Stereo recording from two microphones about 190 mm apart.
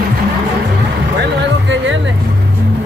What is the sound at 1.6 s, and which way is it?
Speech, 75° right (ahead or behind).